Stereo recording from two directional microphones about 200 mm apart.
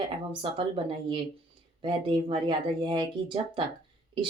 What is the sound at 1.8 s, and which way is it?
Speech, 25° right (ahead or behind).